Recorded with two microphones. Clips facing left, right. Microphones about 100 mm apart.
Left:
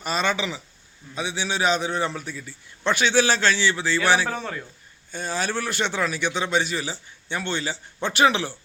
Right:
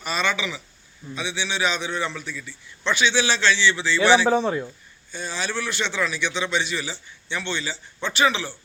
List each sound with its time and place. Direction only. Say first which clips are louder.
0.0 s a man's voice: left 1 dB; 40° left (ahead or behind)
4.3 s speech: right 9 dB; 20° right (ahead or behind)
5.1 s a man's voice: left 2 dB; 45° left (ahead or behind)